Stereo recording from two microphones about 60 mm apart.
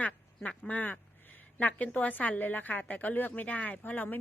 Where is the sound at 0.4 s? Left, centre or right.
Left.